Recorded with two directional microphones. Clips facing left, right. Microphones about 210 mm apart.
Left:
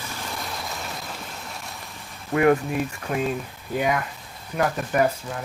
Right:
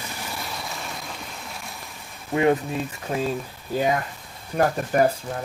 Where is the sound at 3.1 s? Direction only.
30° right (ahead or behind).